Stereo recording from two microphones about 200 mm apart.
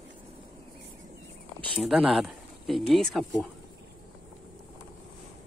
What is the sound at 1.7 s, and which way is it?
Speech, centre (ahead or behind).